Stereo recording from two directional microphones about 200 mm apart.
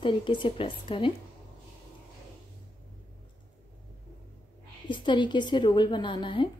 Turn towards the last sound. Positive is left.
turn(degrees=25)  # may be behind; listen again after turning